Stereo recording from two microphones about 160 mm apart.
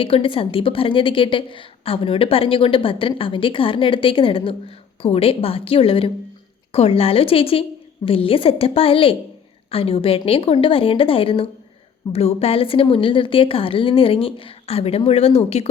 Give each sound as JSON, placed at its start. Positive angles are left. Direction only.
{"t": 0.0, "sound": "a woman's voice", "side_deg": 35}